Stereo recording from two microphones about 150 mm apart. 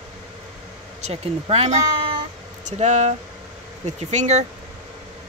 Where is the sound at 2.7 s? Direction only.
50° right (ahead or behind).